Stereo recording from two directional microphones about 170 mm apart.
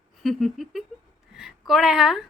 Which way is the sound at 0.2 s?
Centre (ahead or behind).